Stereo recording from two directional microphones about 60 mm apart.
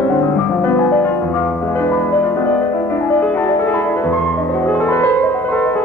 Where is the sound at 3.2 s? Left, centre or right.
Left.